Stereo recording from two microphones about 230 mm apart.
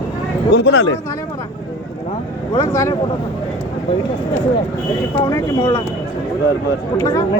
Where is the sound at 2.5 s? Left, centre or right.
Centre.